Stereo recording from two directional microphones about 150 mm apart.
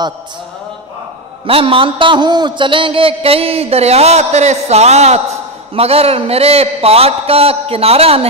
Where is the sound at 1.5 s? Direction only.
40° right (ahead or behind).